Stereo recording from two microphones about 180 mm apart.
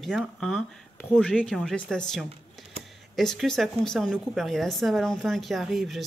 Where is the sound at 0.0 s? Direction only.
Centre (ahead or behind).